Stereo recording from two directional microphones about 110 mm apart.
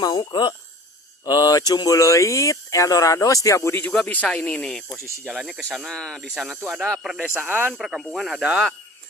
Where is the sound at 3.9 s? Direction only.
10° left (ahead or behind).